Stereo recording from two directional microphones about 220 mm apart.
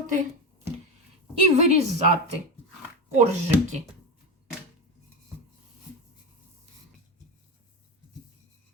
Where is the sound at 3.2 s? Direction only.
30° right (ahead or behind).